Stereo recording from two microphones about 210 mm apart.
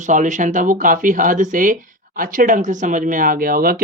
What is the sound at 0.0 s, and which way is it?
Speech, 35° right (ahead or behind).